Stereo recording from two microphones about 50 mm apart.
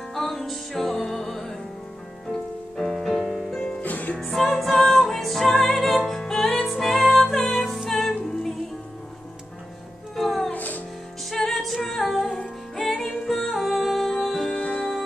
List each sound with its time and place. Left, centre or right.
0.1 s music: centre
2.8 s music: centre
3.8 s music: left
4.2 s music: centre
10.1 s music: centre
10.5 s music: left
11.2 s music: centre
14.5 s music: centre